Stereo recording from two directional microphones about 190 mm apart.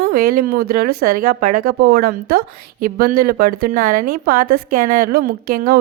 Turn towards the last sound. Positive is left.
turn(degrees=-50)  # may be behind; listen again after turning